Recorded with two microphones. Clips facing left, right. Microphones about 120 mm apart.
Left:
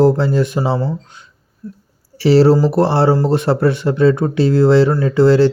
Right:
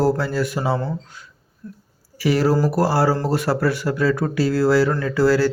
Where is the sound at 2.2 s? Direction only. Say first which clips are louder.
Left 7 dB; 30° left (ahead or behind).